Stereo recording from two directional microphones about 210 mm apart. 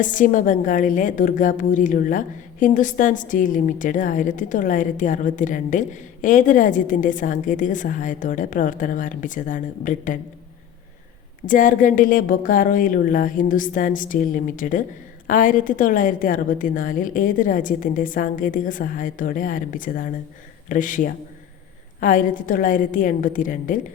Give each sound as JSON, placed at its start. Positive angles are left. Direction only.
{"t": 0.0, "sound": "a woman's voice", "side_deg": 40}
{"t": 11.4, "sound": "a woman's voice", "side_deg": 40}